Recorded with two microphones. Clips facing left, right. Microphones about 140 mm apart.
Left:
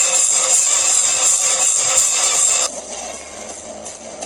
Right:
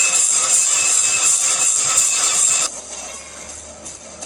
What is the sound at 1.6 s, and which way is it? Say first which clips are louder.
Music: left 4 dB; 55° left (ahead or behind).